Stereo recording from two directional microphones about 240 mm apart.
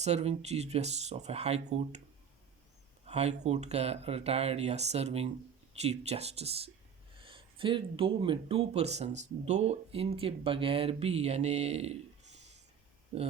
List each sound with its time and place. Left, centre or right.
0.0 s speech: right
3.1 s speech: right
13.1 s speech: right